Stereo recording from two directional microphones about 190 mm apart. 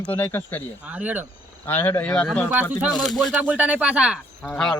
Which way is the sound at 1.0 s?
10° right (ahead or behind).